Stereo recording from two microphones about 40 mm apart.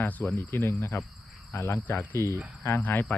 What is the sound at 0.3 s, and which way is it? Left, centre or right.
Speech, left.